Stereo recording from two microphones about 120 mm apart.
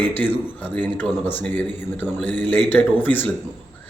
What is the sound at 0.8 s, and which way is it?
Speech, 15° left (ahead or behind).